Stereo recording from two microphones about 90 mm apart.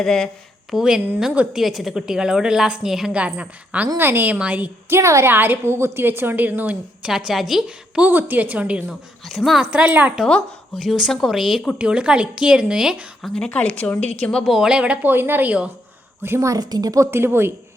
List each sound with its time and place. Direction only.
0.0 s a woman's voice: 5° left (ahead or behind)
0.7 s a woman's voice: 5° right (ahead or behind)
3.9 s a woman's voice: 25° right (ahead or behind)
4.9 s a woman's voice: 30° right (ahead or behind)
7.1 s a woman's voice: 5° right (ahead or behind)
8.0 s a woman's voice: 20° right (ahead or behind)
9.2 s a woman's voice: centre (ahead or behind)
10.8 s a woman's voice: centre (ahead or behind)
13.3 s a woman's voice: 10° left (ahead or behind)
14.4 s a woman's voice: 5° right (ahead or behind)
15.1 s a woman's voice: 25° right (ahead or behind)
16.2 s a woman's voice: 30° right (ahead or behind)
17.1 s a woman's voice: 25° right (ahead or behind)